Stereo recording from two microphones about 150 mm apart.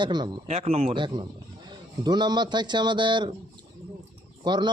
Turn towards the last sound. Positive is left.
turn(degrees=-30)  # may be behind; listen again after turning